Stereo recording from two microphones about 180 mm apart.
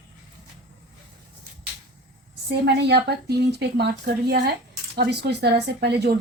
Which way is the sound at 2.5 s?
65° right (ahead or behind).